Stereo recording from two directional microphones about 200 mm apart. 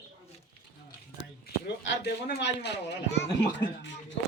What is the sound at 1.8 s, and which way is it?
A man's voice, 60° left (ahead or behind).